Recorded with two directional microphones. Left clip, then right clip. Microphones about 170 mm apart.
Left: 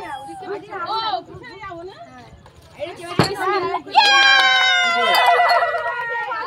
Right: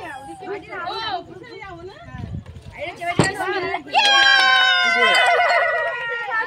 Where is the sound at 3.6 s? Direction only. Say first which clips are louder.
Left 2 dB; 20° right (ahead or behind).